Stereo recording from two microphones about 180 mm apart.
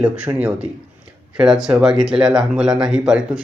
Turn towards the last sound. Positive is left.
turn(degrees=-5)  # may be behind; listen again after turning